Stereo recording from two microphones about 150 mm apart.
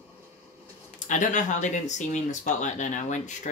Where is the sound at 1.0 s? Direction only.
55° left (ahead or behind).